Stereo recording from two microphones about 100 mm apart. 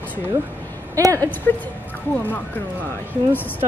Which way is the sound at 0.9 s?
35° right (ahead or behind).